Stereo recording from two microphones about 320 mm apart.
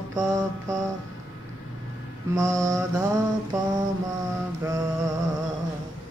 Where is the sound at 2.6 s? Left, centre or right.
Centre.